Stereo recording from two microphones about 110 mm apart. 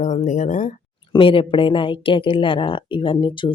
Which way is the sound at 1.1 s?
50° left (ahead or behind).